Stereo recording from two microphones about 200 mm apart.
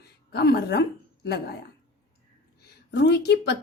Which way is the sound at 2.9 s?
55° left (ahead or behind).